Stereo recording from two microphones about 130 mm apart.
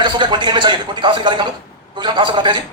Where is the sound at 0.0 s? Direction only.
35° right (ahead or behind).